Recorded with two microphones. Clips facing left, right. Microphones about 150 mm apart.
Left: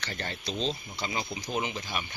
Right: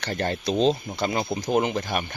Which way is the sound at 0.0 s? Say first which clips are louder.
Right 10 dB; 50° right (ahead or behind).